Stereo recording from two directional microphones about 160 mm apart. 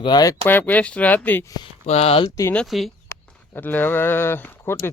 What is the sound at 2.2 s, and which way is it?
Speech, 20° left (ahead or behind).